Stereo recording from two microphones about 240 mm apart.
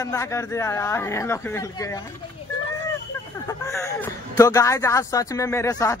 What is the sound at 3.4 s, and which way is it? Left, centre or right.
A man's voice, centre.